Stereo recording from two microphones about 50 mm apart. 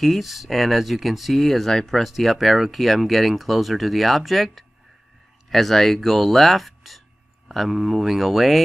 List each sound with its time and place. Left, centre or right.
0.0 s speech: centre